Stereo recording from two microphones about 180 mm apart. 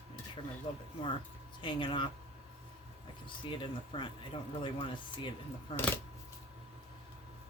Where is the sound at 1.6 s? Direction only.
25° left (ahead or behind).